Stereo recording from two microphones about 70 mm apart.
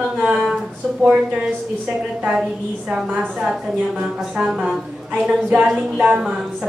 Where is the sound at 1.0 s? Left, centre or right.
Centre.